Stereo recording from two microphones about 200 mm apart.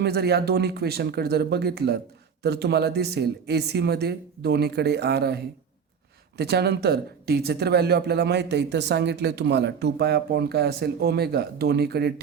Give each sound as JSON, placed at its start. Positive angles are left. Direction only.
{"t": 0.0, "sound": "speech", "side_deg": -55}